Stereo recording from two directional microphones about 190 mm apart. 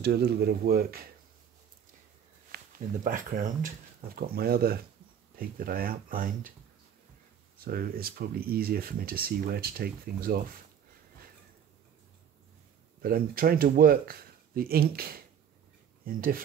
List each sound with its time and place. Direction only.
0.0 s speech: 55° right (ahead or behind)
2.5 s speech: 45° right (ahead or behind)
7.5 s speech: 50° right (ahead or behind)
13.0 s speech: 50° right (ahead or behind)